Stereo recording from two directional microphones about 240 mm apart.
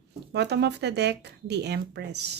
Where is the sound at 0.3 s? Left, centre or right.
Right.